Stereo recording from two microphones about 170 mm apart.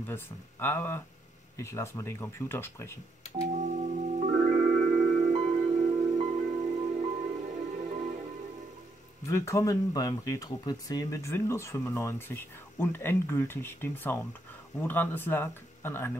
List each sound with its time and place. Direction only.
0.0 s speech: 15° left (ahead or behind)
3.5 s music: 45° right (ahead or behind)
9.3 s speech: 15° left (ahead or behind)